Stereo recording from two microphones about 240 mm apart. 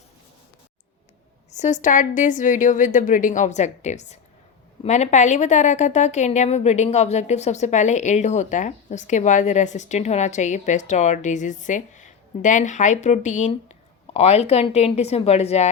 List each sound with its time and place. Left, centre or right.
1.5 s a woman's voice: left